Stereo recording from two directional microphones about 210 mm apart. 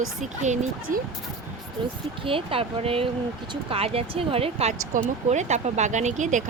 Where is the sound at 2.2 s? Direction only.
25° right (ahead or behind).